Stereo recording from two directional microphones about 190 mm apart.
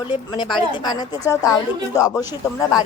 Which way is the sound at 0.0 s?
25° left (ahead or behind).